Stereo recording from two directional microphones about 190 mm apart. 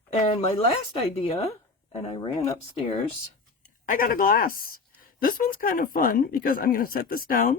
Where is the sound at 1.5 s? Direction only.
25° left (ahead or behind).